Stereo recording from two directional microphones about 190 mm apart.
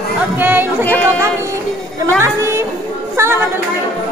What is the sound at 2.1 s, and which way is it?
A woman's voice, 15° right (ahead or behind).